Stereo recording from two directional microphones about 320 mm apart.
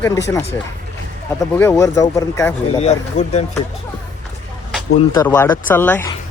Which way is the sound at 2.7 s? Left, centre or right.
Centre.